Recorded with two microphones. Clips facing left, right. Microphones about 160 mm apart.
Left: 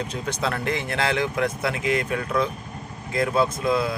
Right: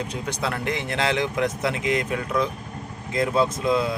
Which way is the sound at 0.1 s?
15° right (ahead or behind).